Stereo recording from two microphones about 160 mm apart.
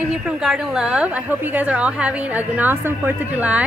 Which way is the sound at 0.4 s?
5° right (ahead or behind).